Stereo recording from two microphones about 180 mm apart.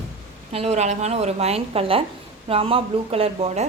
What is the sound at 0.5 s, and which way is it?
A woman's voice, 35° right (ahead or behind).